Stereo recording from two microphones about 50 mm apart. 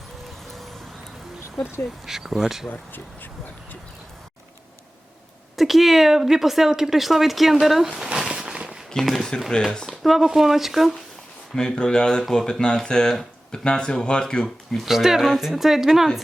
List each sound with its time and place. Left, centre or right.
2.0 s speech: centre
5.5 s speech: centre
8.3 s a sound: centre
9.3 s speech: centre
9.8 s speech: centre
11.5 s speech: centre
14.8 s speech: centre